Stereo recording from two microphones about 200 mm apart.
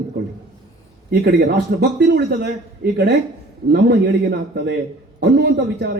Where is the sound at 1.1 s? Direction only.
55° right (ahead or behind).